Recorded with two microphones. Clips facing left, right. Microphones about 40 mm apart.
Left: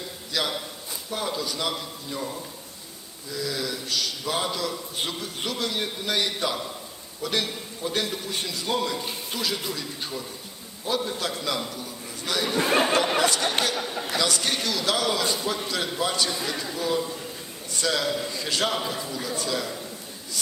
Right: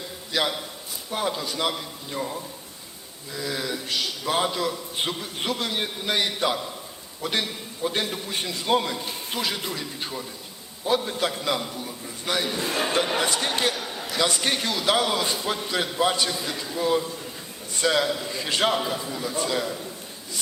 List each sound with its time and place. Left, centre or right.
0.3 s a man's voice: right
3.3 s a man's voice: right
11.7 s a sound: right
12.6 s speech: left
13.1 s speech: centre
13.9 s a man's voice: centre
14.2 s a man's voice: right
18.8 s speech: centre
19.4 s a man's voice: right